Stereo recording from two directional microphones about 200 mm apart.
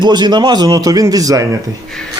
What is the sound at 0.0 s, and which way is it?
A man's voice, 20° right (ahead or behind).